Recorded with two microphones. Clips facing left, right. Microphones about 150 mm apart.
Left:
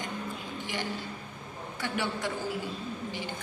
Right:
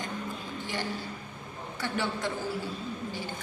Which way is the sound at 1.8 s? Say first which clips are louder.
Right 1 dB; 15° left (ahead or behind).